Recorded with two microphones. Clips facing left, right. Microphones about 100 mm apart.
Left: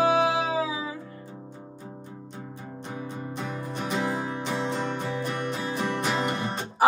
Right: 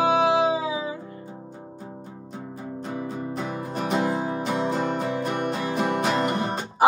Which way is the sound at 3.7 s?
45° right (ahead or behind).